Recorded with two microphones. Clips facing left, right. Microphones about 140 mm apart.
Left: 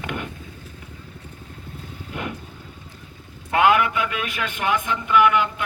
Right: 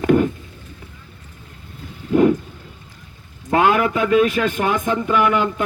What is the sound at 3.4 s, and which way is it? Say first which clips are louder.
A man's voice: right 2 dB; 35° right (ahead or behind).